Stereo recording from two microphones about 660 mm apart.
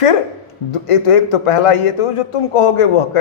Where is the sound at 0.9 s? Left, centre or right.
Left.